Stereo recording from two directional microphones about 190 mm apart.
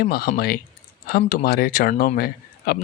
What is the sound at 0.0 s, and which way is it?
Speech, 55° left (ahead or behind).